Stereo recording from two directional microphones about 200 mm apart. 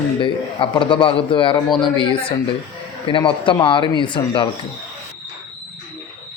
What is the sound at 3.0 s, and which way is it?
Speech, 25° left (ahead or behind).